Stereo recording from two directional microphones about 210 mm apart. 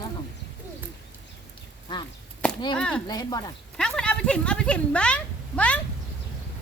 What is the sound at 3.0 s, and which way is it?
Speech, 20° left (ahead or behind).